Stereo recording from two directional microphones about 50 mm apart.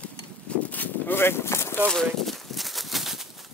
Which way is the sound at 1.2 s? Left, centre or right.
Left.